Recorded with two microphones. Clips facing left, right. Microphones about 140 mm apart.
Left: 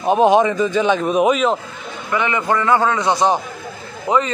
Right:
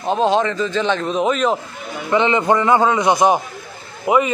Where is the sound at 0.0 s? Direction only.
15° left (ahead or behind).